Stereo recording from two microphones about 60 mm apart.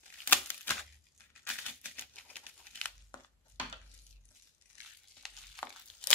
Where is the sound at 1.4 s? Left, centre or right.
Left.